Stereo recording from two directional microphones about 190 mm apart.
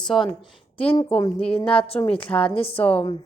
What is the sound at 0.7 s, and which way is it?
Speech, 30° left (ahead or behind).